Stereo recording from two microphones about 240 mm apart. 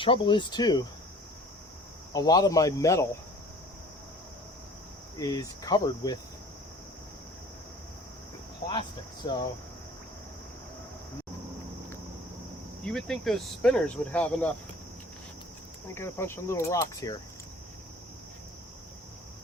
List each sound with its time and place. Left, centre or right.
0.0 s speech: left
2.1 s cricket: centre
5.2 s cricket: centre
9.2 s cricket: centre
12.8 s speech: centre
16.0 s cricket: centre